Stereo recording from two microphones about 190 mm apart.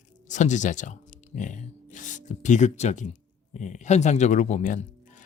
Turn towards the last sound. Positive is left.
turn(degrees=40)  # may be behind; listen again after turning